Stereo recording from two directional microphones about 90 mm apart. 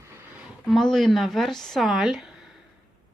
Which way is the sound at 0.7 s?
5° left (ahead or behind).